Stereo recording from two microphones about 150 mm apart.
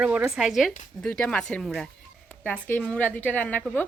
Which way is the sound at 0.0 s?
10° right (ahead or behind).